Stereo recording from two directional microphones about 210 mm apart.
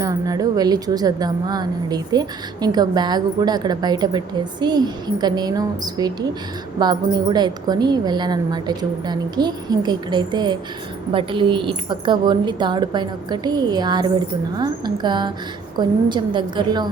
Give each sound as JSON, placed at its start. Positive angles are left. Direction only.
{"t": 0.0, "sound": "a woman's voice", "side_deg": -15}